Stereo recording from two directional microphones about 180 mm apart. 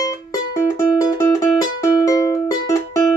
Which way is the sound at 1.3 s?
20° left (ahead or behind).